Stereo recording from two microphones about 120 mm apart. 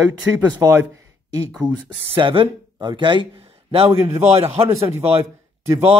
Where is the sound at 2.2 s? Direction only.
45° right (ahead or behind).